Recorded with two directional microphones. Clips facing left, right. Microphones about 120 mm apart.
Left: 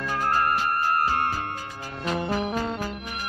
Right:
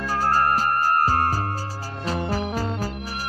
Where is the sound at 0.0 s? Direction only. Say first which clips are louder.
Right 3 dB; 35° right (ahead or behind).